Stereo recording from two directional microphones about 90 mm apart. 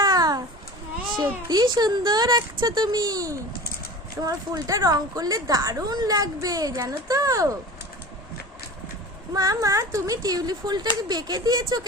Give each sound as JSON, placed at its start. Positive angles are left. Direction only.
{"t": 0.0, "sound": "a sound", "side_deg": -50}
{"t": 1.1, "sound": "a woman's voice", "side_deg": -55}
{"t": 9.3, "sound": "a woman's voice", "side_deg": -40}